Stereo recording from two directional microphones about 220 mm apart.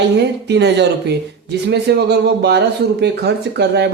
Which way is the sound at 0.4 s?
50° right (ahead or behind).